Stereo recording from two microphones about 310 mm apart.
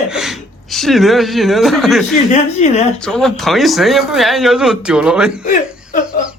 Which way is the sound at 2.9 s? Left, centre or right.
Centre.